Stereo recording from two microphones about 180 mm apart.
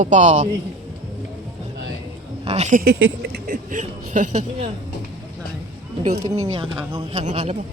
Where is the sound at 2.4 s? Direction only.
35° right (ahead or behind).